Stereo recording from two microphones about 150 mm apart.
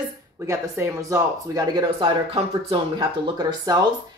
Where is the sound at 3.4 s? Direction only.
25° right (ahead or behind).